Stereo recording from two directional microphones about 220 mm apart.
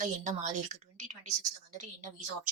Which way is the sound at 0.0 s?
35° right (ahead or behind).